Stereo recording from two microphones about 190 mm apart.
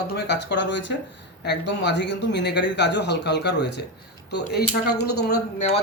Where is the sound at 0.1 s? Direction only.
60° left (ahead or behind).